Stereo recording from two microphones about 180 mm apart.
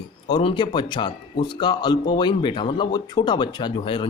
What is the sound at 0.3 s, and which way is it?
Speech, 25° left (ahead or behind).